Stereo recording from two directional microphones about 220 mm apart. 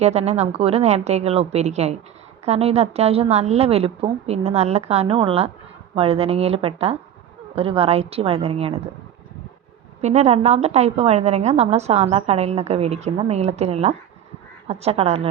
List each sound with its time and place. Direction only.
0.0 s a woman's voice: 30° right (ahead or behind)
10.0 s a woman's voice: 30° right (ahead or behind)